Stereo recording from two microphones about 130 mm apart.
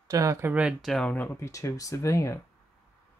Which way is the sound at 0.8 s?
5° left (ahead or behind).